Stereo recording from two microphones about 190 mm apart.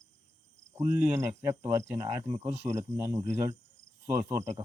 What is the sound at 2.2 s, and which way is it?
Speech, 25° right (ahead or behind).